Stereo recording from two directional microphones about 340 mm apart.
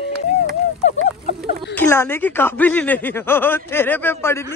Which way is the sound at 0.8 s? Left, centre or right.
Centre.